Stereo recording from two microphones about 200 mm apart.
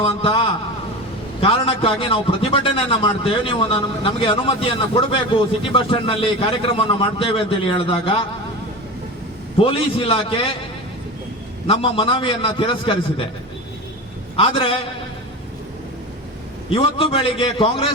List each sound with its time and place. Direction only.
0.0 s a man's voice: 25° left (ahead or behind)
9.6 s a man's voice: 25° left (ahead or behind)
11.7 s a man's voice: 25° left (ahead or behind)
14.3 s a man's voice: 30° left (ahead or behind)
16.6 s a man's voice: 30° left (ahead or behind)